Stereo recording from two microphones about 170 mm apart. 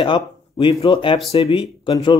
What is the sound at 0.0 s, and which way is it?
Speech, 30° left (ahead or behind).